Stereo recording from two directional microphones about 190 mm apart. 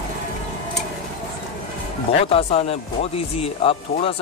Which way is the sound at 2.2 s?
30° left (ahead or behind).